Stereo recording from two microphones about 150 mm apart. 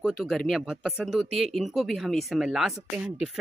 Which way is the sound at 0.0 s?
Centre (ahead or behind).